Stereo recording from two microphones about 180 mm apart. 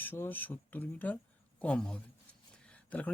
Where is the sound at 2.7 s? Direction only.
5° left (ahead or behind).